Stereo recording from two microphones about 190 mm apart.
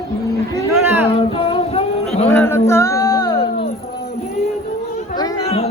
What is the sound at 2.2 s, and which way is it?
Music, 10° left (ahead or behind).